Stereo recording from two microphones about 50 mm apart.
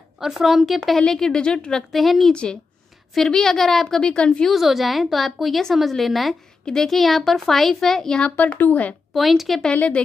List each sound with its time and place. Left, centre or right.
0.2 s speech: centre
0.9 s speech: centre
1.9 s speech: centre
2.3 s speech: centre
4.0 s speech: left
4.5 s speech: centre
6.6 s speech: centre
8.4 s speech: left
9.1 s speech: centre